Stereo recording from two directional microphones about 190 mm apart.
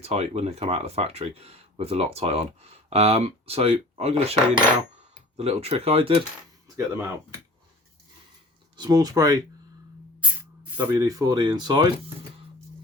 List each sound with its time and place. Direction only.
0.0 s speech: 35° right (ahead or behind)
6.7 s speech: 15° right (ahead or behind)
8.7 s speech: 20° right (ahead or behind)
10.2 s spray: 5° right (ahead or behind)
10.8 s speech: 15° right (ahead or behind)